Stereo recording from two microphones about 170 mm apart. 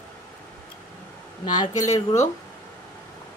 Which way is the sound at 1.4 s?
25° left (ahead or behind).